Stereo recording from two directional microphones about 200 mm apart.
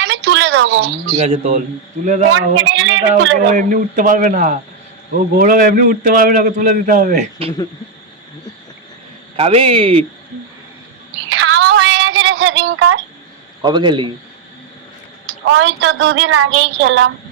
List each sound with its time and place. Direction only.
0.0 s a sound: 65° right (ahead or behind)
1.1 s speech: 30° right (ahead or behind)
2.3 s a woman's voice: 70° right (ahead or behind)
3.5 s a man's voice: 40° right (ahead or behind)
9.3 s speech: 30° right (ahead or behind)
11.3 s child singing: 85° right
13.6 s speech: 20° right (ahead or behind)
15.4 s a woman's voice: 70° right (ahead or behind)